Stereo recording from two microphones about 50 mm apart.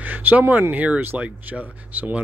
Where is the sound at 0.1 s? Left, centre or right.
Right.